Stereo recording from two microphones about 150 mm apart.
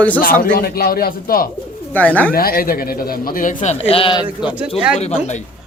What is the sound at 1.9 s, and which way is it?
Speech, 10° left (ahead or behind).